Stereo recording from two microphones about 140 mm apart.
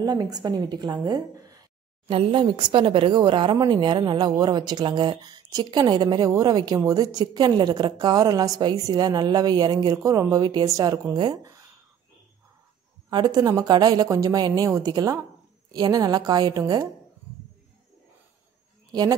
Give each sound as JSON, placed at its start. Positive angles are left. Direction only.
{"t": 0.0, "sound": "speech", "side_deg": -30}
{"t": 2.0, "sound": "speech", "side_deg": -40}
{"t": 13.1, "sound": "speech", "side_deg": -30}
{"t": 18.9, "sound": "speech", "side_deg": -30}